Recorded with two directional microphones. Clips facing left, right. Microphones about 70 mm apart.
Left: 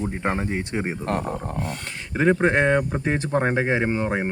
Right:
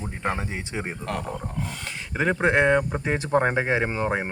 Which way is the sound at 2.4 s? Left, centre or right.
Centre.